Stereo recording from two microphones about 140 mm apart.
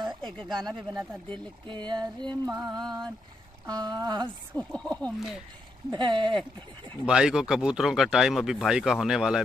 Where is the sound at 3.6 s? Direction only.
30° right (ahead or behind).